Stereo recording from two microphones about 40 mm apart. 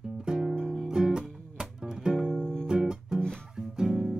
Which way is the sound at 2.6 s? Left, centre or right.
Centre.